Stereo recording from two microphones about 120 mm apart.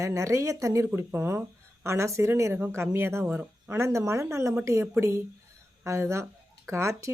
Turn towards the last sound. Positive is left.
turn(degrees=-25)  # may be behind; listen again after turning